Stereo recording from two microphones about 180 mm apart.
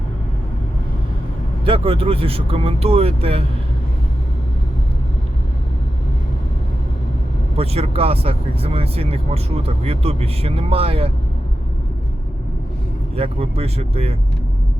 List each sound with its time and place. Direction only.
1.6 s speech: 30° right (ahead or behind)
7.5 s speech: 35° right (ahead or behind)
13.1 s speech: 35° right (ahead or behind)